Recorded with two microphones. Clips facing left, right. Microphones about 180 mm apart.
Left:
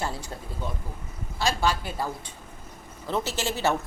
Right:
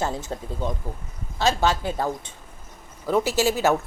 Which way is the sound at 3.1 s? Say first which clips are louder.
Right 7 dB; 15° right (ahead or behind).